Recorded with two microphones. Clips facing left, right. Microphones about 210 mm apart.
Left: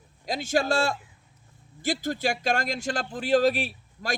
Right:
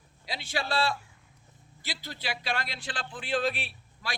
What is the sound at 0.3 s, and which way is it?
A man's voice, 45° left (ahead or behind).